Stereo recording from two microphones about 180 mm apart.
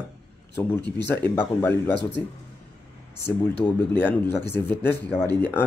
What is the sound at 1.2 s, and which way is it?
Speech, 10° left (ahead or behind).